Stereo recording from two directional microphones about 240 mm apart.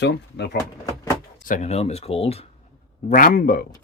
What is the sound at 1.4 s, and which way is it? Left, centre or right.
Speech, left.